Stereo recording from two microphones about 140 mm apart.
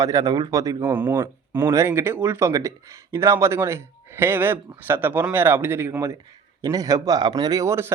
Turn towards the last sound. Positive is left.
turn(degrees=-20)  # may be behind; listen again after turning